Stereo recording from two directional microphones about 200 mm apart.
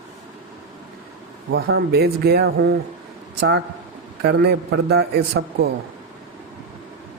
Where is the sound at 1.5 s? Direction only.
50° right (ahead or behind).